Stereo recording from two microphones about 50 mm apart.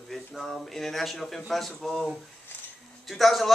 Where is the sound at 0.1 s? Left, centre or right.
Centre.